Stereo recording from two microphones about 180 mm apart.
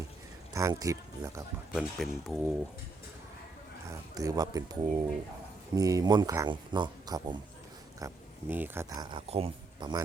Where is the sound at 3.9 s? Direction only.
20° right (ahead or behind).